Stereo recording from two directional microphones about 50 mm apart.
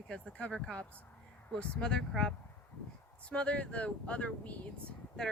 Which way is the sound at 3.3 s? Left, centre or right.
Left.